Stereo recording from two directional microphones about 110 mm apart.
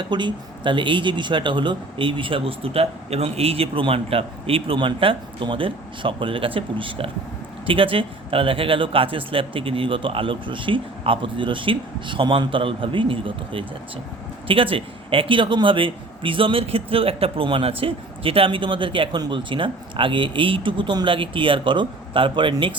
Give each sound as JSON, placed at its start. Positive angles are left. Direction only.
{"t": 0.0, "sound": "speech", "side_deg": -45}